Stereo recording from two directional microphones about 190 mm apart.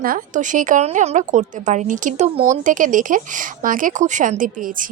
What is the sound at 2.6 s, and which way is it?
A woman's voice, 45° right (ahead or behind).